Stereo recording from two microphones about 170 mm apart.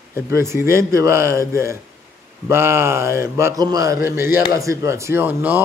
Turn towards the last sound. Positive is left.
turn(degrees=-10)  # may be behind; listen again after turning